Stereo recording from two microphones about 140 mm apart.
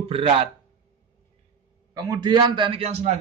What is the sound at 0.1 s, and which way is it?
Speech, 45° right (ahead or behind).